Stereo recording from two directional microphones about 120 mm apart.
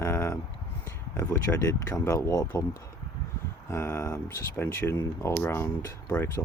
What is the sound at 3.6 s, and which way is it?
Speech, 20° left (ahead or behind).